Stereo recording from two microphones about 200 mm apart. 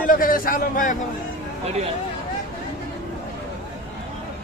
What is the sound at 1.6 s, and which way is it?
Speech, 30° right (ahead or behind).